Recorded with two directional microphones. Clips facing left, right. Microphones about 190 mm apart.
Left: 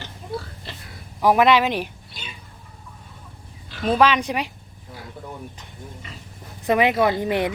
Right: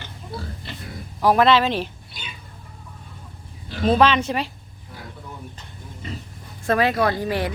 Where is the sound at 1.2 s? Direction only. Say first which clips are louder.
Even; 15° left (ahead or behind).